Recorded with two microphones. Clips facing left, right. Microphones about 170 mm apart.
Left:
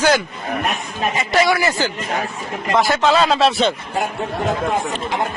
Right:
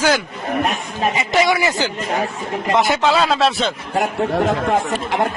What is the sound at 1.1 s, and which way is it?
Speech, 20° right (ahead or behind).